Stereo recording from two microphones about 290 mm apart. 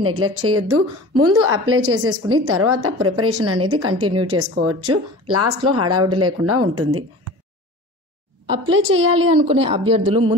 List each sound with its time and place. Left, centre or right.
0.0 s a woman's voice: right
9.1 s a woman's voice: right